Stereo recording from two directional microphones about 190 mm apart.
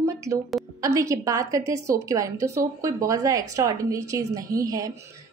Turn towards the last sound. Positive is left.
turn(degrees=-20)  # may be behind; listen again after turning